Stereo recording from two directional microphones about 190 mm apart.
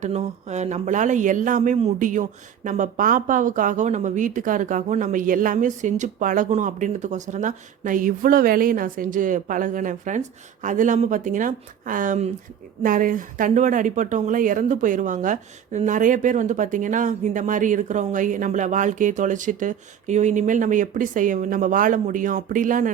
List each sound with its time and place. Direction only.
0.0 s speech: 35° right (ahead or behind)